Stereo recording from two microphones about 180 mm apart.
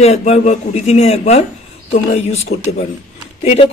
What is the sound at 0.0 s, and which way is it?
Speech, 35° left (ahead or behind).